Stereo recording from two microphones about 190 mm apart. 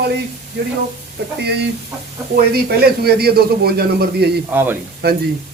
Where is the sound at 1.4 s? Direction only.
60° right (ahead or behind).